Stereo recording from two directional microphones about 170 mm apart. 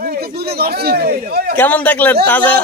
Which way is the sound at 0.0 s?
65° right (ahead or behind).